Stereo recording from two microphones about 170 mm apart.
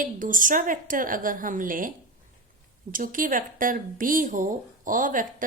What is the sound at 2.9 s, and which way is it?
A woman's voice, 50° right (ahead or behind).